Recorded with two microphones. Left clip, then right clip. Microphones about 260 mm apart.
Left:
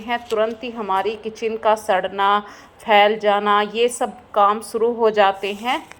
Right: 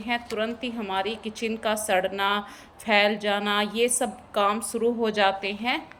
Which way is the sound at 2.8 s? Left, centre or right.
Left.